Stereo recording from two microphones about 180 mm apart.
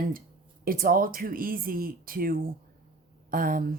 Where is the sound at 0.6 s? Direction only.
55° right (ahead or behind).